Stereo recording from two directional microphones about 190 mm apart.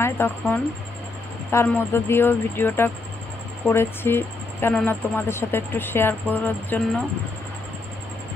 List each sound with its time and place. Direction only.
0.0 s speech: 10° left (ahead or behind)